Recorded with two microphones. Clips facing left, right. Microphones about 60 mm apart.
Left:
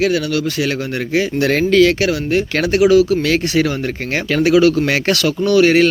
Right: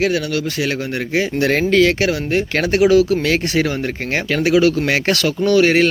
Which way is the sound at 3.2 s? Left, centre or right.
Right.